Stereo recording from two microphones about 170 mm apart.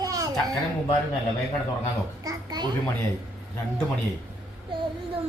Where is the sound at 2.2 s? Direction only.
25° right (ahead or behind).